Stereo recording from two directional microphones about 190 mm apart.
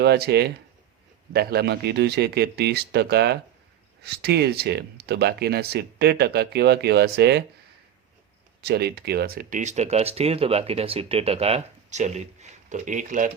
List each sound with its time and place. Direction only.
0.0 s speech: 60° right (ahead or behind)
8.6 s speech: 60° right (ahead or behind); by 13.3 s 45° right (ahead or behind)